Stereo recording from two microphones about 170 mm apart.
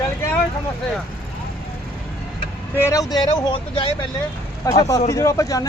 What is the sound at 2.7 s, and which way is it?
Speech, 15° left (ahead or behind).